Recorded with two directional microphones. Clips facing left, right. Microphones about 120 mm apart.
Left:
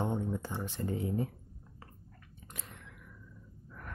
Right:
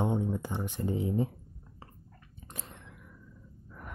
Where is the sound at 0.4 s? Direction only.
15° right (ahead or behind).